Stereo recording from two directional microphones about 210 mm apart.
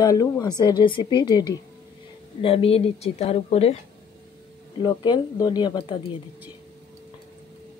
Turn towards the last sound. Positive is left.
turn(degrees=20)  # may be behind; listen again after turning